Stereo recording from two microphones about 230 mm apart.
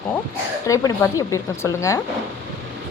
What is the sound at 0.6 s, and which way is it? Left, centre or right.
A woman's voice, centre.